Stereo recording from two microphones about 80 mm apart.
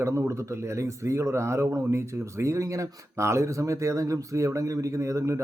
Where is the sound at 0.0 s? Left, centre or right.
Right.